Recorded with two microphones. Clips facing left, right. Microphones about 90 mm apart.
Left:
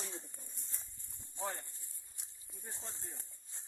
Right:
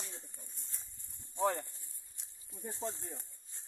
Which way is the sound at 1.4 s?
90° right.